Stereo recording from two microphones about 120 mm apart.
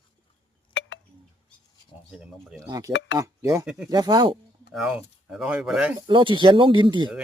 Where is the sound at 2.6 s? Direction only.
30° right (ahead or behind).